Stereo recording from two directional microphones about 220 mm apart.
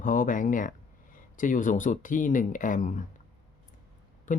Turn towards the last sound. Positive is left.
turn(degrees=35)  # may be behind; listen again after turning